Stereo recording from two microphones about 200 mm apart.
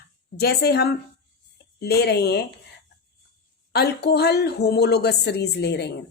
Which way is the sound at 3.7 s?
55° left (ahead or behind).